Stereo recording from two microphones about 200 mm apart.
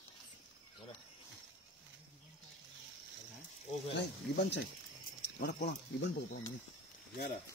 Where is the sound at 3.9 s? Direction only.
60° left (ahead or behind).